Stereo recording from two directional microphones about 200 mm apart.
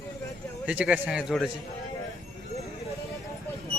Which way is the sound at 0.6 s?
5° right (ahead or behind).